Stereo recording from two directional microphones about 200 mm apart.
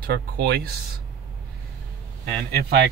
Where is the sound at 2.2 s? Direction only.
60° right (ahead or behind).